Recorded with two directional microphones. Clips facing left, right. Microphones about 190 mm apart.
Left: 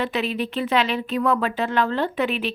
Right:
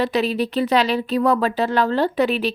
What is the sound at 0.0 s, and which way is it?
Speech, 35° right (ahead or behind).